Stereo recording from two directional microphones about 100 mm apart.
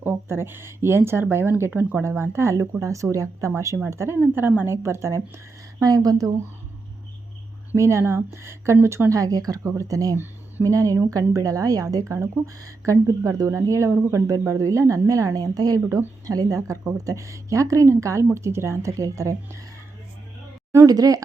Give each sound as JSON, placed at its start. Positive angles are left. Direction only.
{"t": 0.0, "sound": "speech", "side_deg": -25}
{"t": 7.7, "sound": "speech", "side_deg": -25}
{"t": 20.8, "sound": "speech", "side_deg": -35}